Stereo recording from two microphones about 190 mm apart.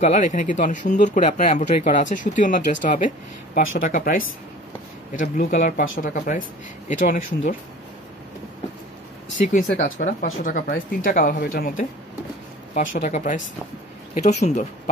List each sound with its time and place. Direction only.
0.0 s speech: 40° left (ahead or behind)
9.5 s speech: 45° left (ahead or behind)